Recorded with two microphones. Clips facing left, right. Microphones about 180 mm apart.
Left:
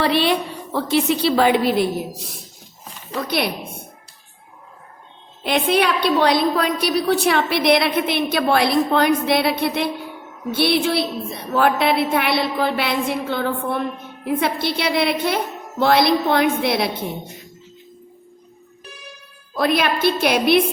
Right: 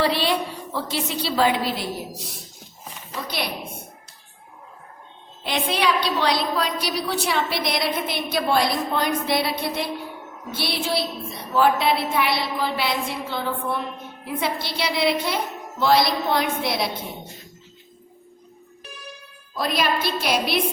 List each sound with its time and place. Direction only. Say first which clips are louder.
0.0 s a woman's voice: left 3 dB; 60° left (ahead or behind)
5.4 s a woman's voice: left 6 dB; 55° left (ahead or behind)
19.5 s a woman's voice: left 4 dB; 60° left (ahead or behind)